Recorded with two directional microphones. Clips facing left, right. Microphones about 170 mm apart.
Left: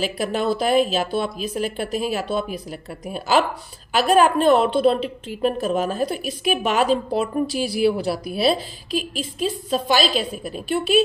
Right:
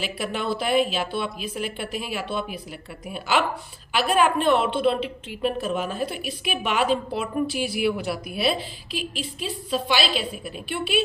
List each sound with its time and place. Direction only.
0.0 s a woman's voice: 40° left (ahead or behind)